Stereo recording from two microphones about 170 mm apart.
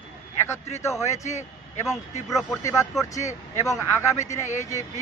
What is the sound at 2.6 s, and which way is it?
Speech, 15° left (ahead or behind).